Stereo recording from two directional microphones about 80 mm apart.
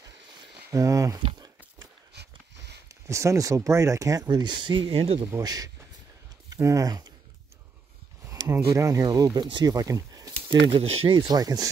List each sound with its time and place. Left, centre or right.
0.7 s speech: right
2.9 s speech: right
4.3 s speech: right
5.4 s speech: right
8.5 s speech: right
9.0 s speech: right
10.5 s speech: right